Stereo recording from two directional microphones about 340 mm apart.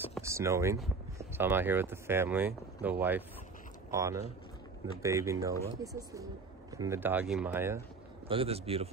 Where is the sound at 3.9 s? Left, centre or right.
Centre.